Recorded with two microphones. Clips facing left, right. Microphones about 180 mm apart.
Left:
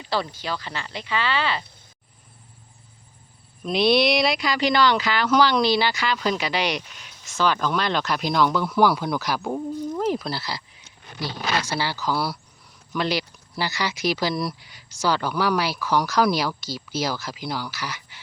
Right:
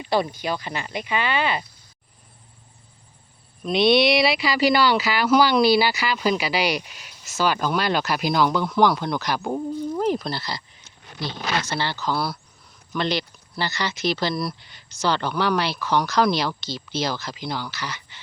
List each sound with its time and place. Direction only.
0.0 s speech: 15° right (ahead or behind)
3.6 s speech: centre (ahead or behind)